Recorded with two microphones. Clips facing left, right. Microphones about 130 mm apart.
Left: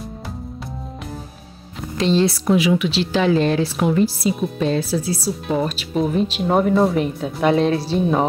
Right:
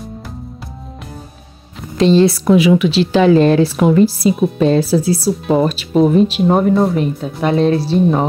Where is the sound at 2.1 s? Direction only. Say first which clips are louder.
Right 6 dB; 60° right (ahead or behind).